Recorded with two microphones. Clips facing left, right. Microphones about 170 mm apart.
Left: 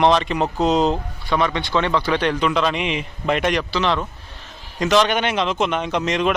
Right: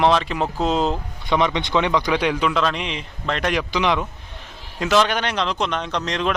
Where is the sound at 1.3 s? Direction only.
20° right (ahead or behind); by 3.5 s 10° left (ahead or behind).